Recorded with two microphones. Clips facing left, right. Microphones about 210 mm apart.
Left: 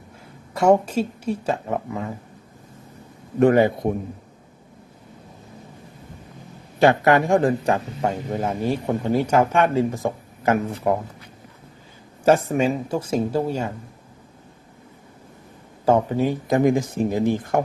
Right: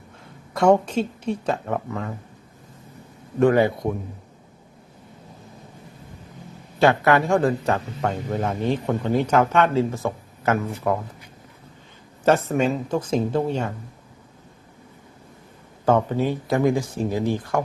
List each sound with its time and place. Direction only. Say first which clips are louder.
0.5 s a man's voice: even; 10° left (ahead or behind)
3.4 s a man's voice: left 2 dB; 15° left (ahead or behind)
6.7 s a man's voice: left 1 dB; 15° left (ahead or behind)
12.2 s a man's voice: left 1 dB; 10° left (ahead or behind)
15.9 s speech: left 1 dB; 10° left (ahead or behind)